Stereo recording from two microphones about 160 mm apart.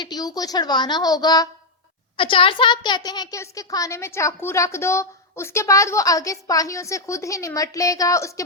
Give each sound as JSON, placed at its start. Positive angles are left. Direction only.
{"t": 0.0, "sound": "a woman's voice", "side_deg": 25}